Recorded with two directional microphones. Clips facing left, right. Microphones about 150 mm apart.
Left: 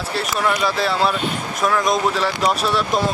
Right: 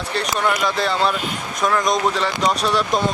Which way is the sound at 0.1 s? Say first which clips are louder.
Even; 5° left (ahead or behind).